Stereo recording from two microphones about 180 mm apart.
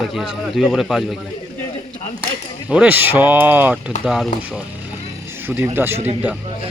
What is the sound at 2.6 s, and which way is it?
Speech, 5° right (ahead or behind).